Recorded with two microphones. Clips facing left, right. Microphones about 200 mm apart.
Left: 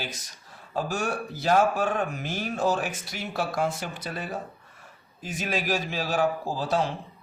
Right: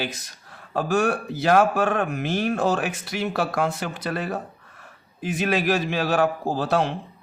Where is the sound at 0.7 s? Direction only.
65° right (ahead or behind).